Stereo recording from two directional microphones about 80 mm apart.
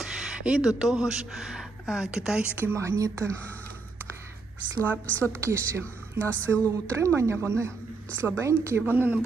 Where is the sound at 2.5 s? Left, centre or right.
Right.